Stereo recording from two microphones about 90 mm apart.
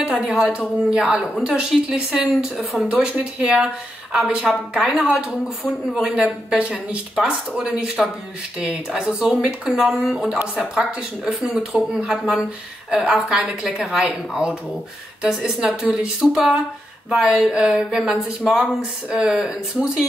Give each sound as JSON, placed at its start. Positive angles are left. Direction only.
{"t": 0.0, "sound": "a woman's voice", "side_deg": -5}